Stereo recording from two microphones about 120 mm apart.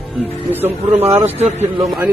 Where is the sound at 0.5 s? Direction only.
15° right (ahead or behind).